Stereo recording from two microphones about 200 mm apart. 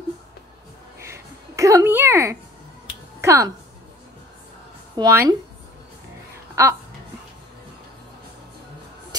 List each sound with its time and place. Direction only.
0.9 s a sound: 15° right (ahead or behind)
3.2 s speech: 15° right (ahead or behind)
4.9 s speech: 15° right (ahead or behind)
6.6 s speech: 15° right (ahead or behind)